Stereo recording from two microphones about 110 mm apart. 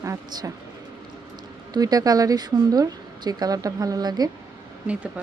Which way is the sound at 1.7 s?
35° right (ahead or behind).